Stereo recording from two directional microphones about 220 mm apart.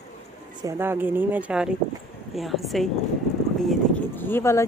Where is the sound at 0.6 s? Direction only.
10° right (ahead or behind).